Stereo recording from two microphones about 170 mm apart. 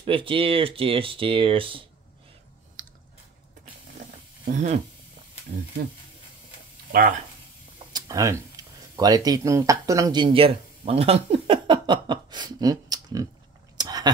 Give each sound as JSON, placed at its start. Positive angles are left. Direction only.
{"t": 0.0, "sound": "speech", "side_deg": -30}
{"t": 4.5, "sound": "speech", "side_deg": -40}
{"t": 6.9, "sound": "speech", "side_deg": -55}
{"t": 7.9, "sound": "speech", "side_deg": -20}
{"t": 13.7, "sound": "a sound", "side_deg": -25}